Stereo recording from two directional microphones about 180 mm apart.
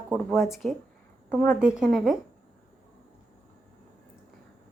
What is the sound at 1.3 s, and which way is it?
Speech, 10° left (ahead or behind).